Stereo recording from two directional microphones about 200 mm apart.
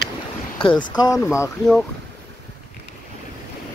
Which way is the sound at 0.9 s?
20° left (ahead or behind).